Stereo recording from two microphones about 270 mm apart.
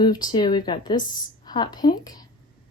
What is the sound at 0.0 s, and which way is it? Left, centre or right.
Speech, centre.